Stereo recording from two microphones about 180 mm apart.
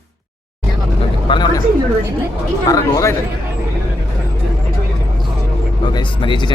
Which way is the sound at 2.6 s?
20° left (ahead or behind).